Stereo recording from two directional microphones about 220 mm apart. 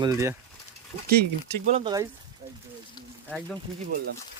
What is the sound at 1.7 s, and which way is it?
Speech, 20° right (ahead or behind).